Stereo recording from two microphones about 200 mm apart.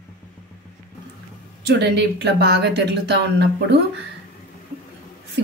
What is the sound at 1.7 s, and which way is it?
Speech, 55° right (ahead or behind).